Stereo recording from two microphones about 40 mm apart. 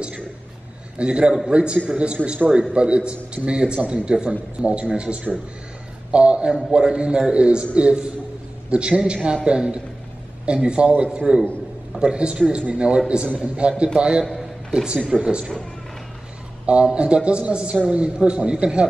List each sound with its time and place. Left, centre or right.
0.9 s a man's voice: right
11.1 s a man's voice: right
16.6 s a man's voice: right